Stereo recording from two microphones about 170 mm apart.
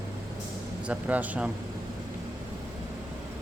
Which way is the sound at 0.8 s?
10° right (ahead or behind).